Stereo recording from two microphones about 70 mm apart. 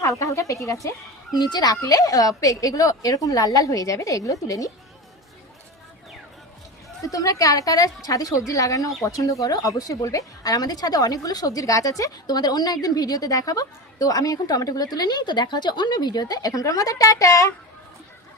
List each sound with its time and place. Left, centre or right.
0.0 s a woman's voice: left
1.4 s speech: left
7.0 s speech: left